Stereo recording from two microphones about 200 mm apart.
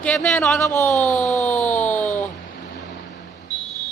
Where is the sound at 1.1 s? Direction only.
35° left (ahead or behind).